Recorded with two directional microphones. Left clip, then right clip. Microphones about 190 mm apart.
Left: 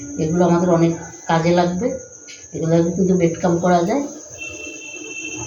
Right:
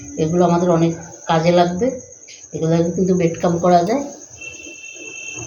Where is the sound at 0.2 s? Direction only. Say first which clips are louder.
Right 1 dB; 45° right (ahead or behind).